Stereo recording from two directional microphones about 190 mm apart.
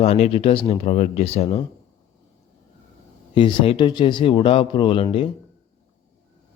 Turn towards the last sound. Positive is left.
turn(degrees=30)  # may be behind; listen again after turning